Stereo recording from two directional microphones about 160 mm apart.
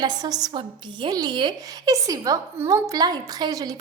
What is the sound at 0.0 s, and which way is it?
A woman's voice, 25° right (ahead or behind).